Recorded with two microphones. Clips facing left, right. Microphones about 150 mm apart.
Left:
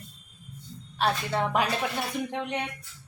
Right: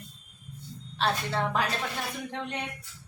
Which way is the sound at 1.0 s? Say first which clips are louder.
Left 2 dB; 15° left (ahead or behind).